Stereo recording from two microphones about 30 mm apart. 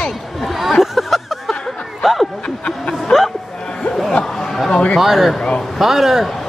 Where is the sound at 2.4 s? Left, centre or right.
Left.